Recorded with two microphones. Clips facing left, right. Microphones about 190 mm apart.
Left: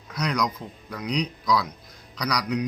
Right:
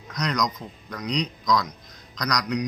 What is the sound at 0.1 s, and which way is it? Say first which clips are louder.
A man's voice: even; 5° left (ahead or behind).